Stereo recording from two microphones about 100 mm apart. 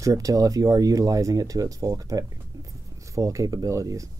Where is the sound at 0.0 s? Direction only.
35° right (ahead or behind).